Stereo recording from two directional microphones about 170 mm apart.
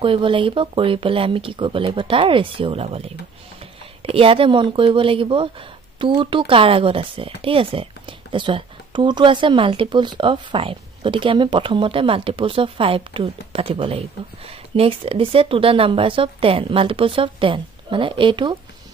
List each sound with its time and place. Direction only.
0.0 s speech: 30° right (ahead or behind)